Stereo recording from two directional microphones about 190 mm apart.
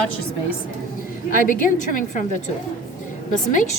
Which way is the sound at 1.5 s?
45° left (ahead or behind).